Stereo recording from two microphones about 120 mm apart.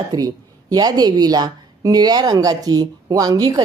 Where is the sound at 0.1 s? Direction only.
30° right (ahead or behind).